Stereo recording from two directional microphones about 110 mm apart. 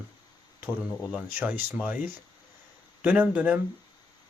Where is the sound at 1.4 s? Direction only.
15° right (ahead or behind).